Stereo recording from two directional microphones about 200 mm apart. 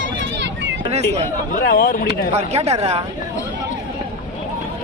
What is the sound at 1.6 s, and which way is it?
Speech, 45° left (ahead or behind).